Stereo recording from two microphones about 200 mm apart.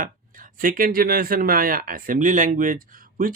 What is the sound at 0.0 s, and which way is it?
Speech, 45° right (ahead or behind).